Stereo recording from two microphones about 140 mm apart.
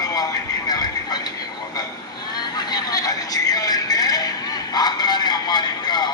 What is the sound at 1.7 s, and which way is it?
Vehicle, 30° left (ahead or behind).